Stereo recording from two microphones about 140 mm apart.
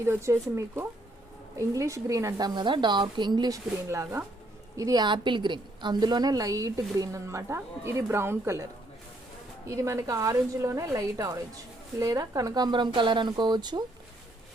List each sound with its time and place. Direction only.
0.1 s a woman's voice: 20° right (ahead or behind)
3.8 s a woman's voice: 20° right (ahead or behind)
9.6 s a woman's voice: 20° right (ahead or behind)